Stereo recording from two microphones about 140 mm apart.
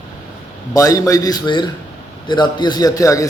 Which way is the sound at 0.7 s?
25° left (ahead or behind).